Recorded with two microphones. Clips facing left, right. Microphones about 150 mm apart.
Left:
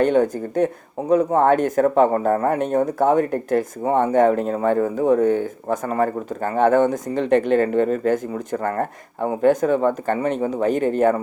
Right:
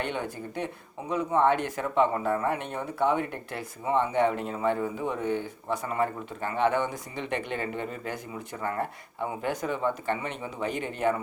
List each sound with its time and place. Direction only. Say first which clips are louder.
0.0 s speech: left 15 dB; 45° left (ahead or behind)